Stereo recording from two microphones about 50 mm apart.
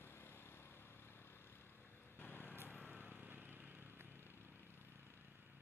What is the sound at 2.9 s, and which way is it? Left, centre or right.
Vehicle, right.